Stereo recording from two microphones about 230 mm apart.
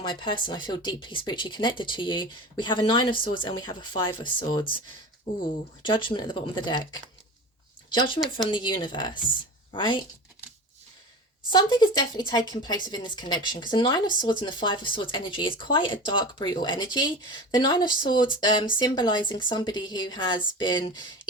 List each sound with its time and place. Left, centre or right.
0.0 s speech: centre
5.8 s speech: left
11.5 s speech: centre